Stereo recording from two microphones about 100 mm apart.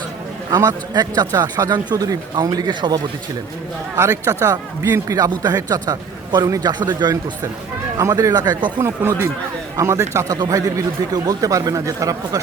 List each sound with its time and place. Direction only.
0.5 s a man's voice: 40° right (ahead or behind)
3.9 s a man's voice: 30° right (ahead or behind)
9.7 s a man's voice: 30° right (ahead or behind)